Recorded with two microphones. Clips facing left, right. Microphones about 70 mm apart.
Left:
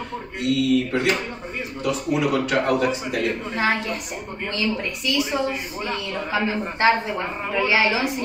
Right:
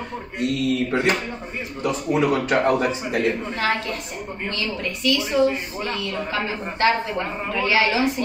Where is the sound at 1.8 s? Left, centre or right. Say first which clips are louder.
Right 1 dB; right.